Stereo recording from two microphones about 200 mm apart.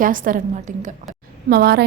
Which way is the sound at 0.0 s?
45° right (ahead or behind).